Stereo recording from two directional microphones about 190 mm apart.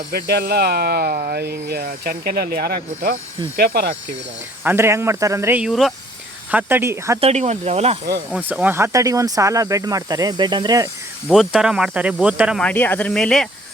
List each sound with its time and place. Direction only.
0.1 s speech: 55° right (ahead or behind)
4.6 s speech: 10° right (ahead or behind)
7.2 s speech: 35° right (ahead or behind)
8.3 s speech: 5° right (ahead or behind)
11.3 s speech: 5° right (ahead or behind)
12.6 s speech: 10° left (ahead or behind)